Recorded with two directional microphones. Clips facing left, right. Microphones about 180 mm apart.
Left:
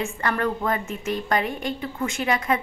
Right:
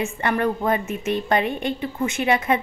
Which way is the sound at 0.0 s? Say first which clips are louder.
Right 3 dB; 20° right (ahead or behind).